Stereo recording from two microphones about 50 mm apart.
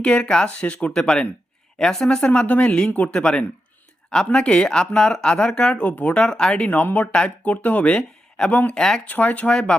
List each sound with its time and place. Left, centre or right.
0.0 s speech: centre
0.9 s speech: centre
5.8 s speech: left
6.1 s speech: centre
8.7 s speech: centre
9.0 s speech: left
9.5 s speech: centre